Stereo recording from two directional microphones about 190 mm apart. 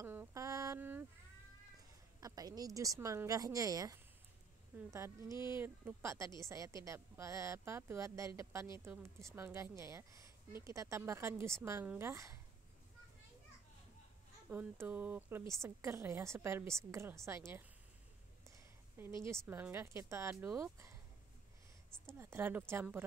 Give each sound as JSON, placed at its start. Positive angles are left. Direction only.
{"t": 0.0, "sound": "a sound", "side_deg": -15}
{"t": 2.1, "sound": "a woman's voice", "side_deg": -20}
{"t": 14.5, "sound": "a woman's voice", "side_deg": -10}
{"t": 19.0, "sound": "a woman's voice", "side_deg": -10}
{"t": 22.2, "sound": "a woman's voice", "side_deg": -10}